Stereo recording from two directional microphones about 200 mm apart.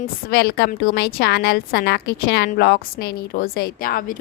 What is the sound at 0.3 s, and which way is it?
A woman's voice, 50° left (ahead or behind).